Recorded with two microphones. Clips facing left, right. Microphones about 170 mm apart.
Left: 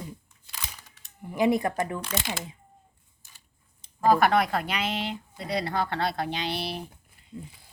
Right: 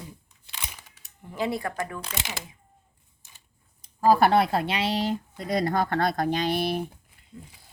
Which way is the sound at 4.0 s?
30° right (ahead or behind).